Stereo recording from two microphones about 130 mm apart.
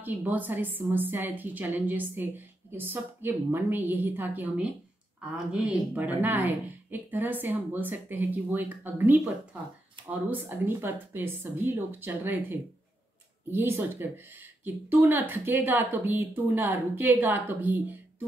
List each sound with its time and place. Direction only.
0.0 s a woman's voice: 15° right (ahead or behind)